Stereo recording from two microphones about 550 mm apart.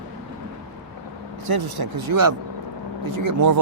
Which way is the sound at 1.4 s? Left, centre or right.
Right.